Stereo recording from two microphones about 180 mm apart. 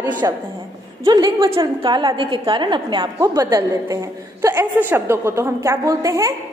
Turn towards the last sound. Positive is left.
turn(degrees=-20)  # may be behind; listen again after turning